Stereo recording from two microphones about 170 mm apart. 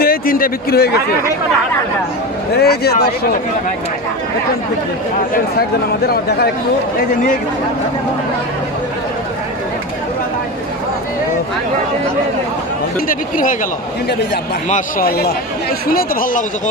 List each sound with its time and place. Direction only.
0.0 s a man's voice: 55° left (ahead or behind)
2.5 s speech: 70° left (ahead or behind)
6.0 s speech: 70° left (ahead or behind)
13.1 s speech: 55° left (ahead or behind)
14.7 s a man's voice: 60° left (ahead or behind)